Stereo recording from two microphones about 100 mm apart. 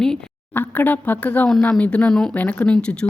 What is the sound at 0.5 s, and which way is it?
A woman's voice, 20° left (ahead or behind).